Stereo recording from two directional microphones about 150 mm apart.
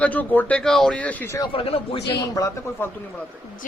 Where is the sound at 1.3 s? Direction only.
35° left (ahead or behind).